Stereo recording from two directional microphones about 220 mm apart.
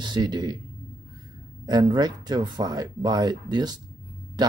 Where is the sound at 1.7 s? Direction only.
20° right (ahead or behind).